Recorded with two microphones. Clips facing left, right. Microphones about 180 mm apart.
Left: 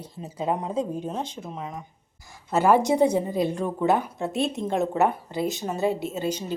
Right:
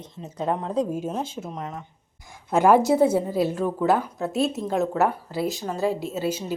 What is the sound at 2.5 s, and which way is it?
A woman's voice, 10° right (ahead or behind).